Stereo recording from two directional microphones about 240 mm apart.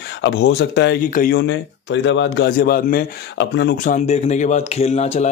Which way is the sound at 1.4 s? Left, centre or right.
Left.